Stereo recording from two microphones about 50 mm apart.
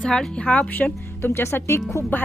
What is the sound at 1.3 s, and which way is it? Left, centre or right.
Speech, left.